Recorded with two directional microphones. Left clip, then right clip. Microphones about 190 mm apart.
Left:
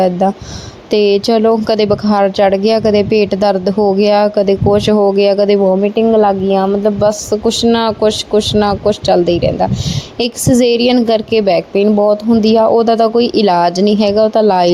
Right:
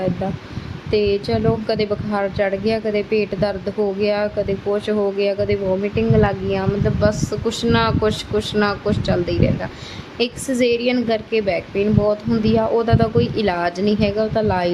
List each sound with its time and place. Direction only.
0.9 s a woman's voice: 35° left (ahead or behind)